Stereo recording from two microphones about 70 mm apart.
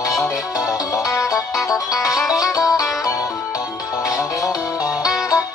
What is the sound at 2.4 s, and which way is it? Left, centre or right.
Music, left.